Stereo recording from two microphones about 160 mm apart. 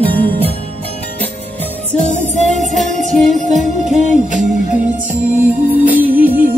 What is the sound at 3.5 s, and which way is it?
Music, 50° right (ahead or behind).